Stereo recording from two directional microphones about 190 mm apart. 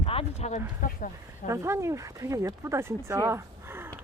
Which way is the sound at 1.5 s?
15° right (ahead or behind).